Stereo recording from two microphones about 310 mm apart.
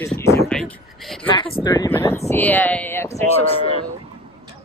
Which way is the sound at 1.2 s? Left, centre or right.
Centre.